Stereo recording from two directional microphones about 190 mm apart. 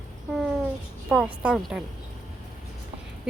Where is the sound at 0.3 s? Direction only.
Centre (ahead or behind).